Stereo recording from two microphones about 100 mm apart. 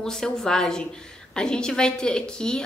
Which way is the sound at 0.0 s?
5° left (ahead or behind).